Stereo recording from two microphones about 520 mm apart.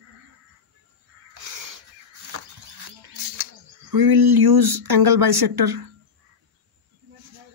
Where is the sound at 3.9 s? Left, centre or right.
Right.